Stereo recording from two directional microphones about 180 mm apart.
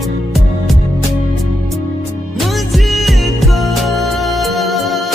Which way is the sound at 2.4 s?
Centre (ahead or behind).